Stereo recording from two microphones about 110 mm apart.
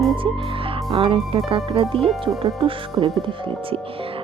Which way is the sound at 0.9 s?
55° right (ahead or behind).